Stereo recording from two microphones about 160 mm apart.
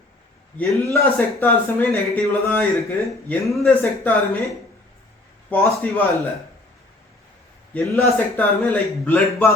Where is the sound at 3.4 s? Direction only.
Centre (ahead or behind).